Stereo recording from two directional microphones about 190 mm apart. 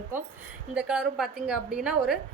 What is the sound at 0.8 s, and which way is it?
A woman's voice, 5° right (ahead or behind).